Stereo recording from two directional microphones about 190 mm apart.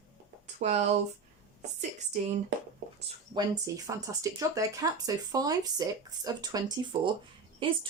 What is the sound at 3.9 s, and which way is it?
Speech, 20° right (ahead or behind).